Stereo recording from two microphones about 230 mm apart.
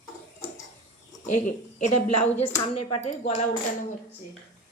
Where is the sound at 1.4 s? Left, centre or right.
Left.